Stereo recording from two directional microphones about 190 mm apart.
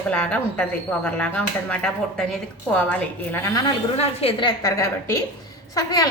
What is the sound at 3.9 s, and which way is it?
A woman's voice, 30° left (ahead or behind).